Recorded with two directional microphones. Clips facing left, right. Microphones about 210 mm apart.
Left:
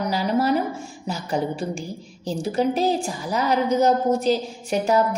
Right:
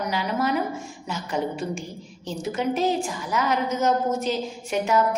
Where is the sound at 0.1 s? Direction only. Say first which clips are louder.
Left 4 dB; 35° left (ahead or behind).